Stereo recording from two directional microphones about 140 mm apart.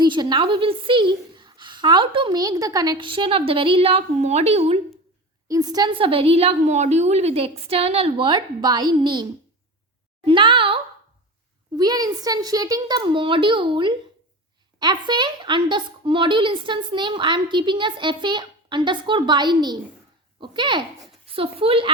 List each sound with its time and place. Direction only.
0.0 s a woman's voice: 30° right (ahead or behind); by 4.8 s 45° right (ahead or behind)
5.5 s a woman's voice: 25° right (ahead or behind)
10.2 s a woman's voice: 35° right (ahead or behind)
11.8 s a woman's voice: 30° right (ahead or behind)